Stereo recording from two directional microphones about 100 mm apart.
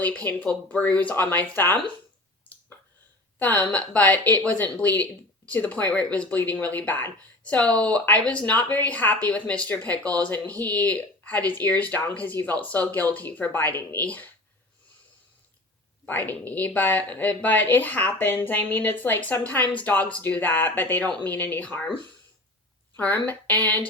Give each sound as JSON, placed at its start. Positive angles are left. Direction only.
{"t": 0.0, "sound": "speech", "side_deg": 15}
{"t": 3.3, "sound": "speech", "side_deg": 15}
{"t": 16.0, "sound": "speech", "side_deg": 15}
{"t": 23.0, "sound": "speech", "side_deg": 15}